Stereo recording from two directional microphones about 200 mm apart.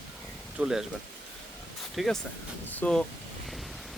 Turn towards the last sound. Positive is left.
turn(degrees=5)  # may be behind; listen again after turning